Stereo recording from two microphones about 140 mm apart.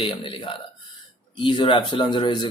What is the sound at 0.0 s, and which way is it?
Speech, 35° left (ahead or behind).